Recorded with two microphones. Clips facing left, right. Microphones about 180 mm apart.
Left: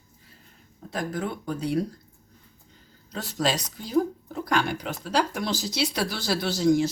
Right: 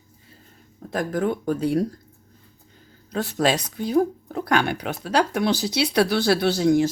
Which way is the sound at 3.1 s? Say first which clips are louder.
Right 5 dB; 60° right (ahead or behind).